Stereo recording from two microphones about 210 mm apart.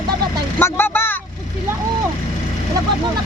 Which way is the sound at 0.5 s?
10° left (ahead or behind).